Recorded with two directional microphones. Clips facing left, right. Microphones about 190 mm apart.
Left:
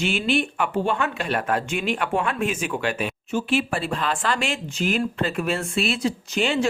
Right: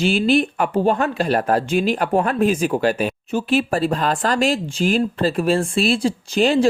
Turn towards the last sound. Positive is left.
turn(degrees=-35)  # may be behind; listen again after turning